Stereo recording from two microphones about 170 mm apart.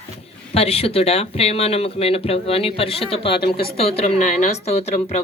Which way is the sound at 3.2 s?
75° left (ahead or behind).